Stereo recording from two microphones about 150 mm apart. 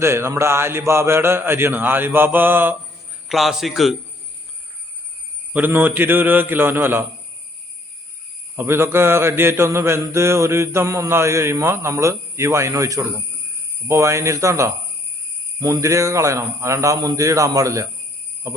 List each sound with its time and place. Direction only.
0.0 s mantra: 15° right (ahead or behind)
3.2 s a man's voice: centre (ahead or behind)
5.5 s mantra: 10° right (ahead or behind)
8.5 s mantra: 15° right (ahead or behind)
13.8 s a man's voice: 20° right (ahead or behind)